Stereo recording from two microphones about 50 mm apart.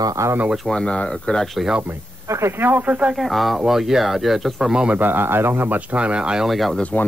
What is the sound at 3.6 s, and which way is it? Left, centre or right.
Speech, centre.